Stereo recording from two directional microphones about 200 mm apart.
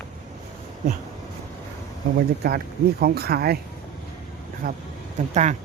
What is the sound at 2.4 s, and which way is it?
Speech, 50° right (ahead or behind).